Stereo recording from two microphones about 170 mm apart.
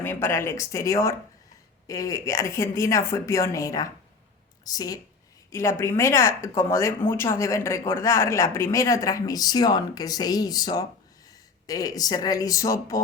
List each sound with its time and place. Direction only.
0.0 s speech: 15° left (ahead or behind)